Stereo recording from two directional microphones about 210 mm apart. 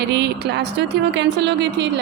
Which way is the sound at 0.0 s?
55° right (ahead or behind).